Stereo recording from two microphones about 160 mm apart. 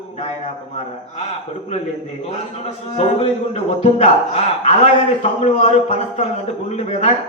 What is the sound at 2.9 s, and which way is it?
A man's voice, 40° left (ahead or behind).